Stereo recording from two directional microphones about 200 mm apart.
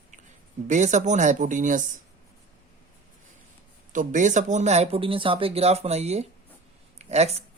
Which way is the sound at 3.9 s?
40° right (ahead or behind).